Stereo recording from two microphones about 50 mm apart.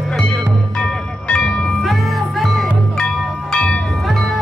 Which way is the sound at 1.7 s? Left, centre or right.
Centre.